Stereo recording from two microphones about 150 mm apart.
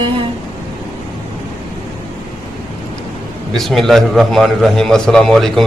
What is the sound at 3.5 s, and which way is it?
A man's voice, centre (ahead or behind).